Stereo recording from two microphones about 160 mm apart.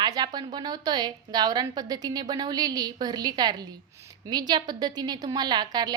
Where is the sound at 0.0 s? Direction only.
25° right (ahead or behind).